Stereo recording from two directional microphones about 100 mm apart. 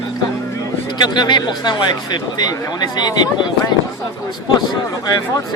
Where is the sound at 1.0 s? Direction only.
45° left (ahead or behind).